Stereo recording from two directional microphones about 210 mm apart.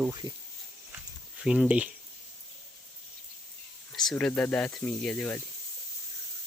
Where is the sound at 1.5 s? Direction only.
5° right (ahead or behind).